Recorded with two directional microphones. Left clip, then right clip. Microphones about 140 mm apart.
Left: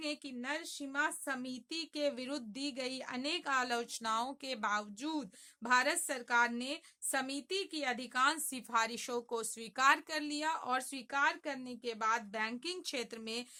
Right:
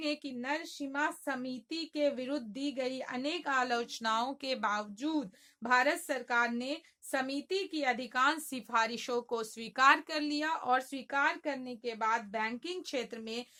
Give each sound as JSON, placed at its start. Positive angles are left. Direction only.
{"t": 0.0, "sound": "speech", "side_deg": 10}